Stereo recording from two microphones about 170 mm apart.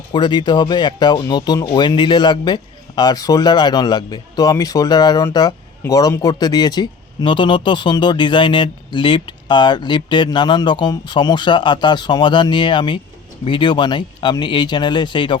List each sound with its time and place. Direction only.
0.1 s speech: 25° left (ahead or behind)